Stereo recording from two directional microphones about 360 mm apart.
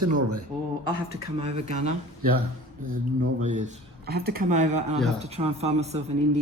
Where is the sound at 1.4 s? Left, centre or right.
Centre.